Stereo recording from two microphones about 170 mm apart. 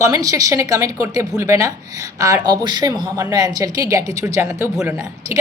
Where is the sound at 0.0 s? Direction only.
20° right (ahead or behind).